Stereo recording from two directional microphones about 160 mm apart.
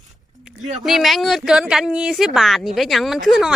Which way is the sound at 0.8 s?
Centre (ahead or behind).